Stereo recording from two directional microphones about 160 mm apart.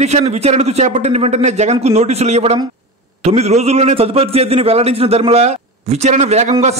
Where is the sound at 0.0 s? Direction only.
45° right (ahead or behind).